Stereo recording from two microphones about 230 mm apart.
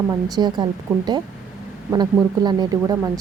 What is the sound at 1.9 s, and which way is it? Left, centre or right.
Speech, centre.